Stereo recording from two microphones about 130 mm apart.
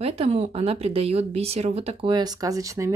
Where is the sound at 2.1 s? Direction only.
30° right (ahead or behind).